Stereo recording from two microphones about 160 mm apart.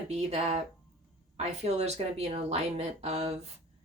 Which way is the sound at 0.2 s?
45° right (ahead or behind).